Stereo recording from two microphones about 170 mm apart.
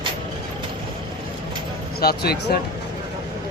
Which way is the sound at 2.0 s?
65° left (ahead or behind).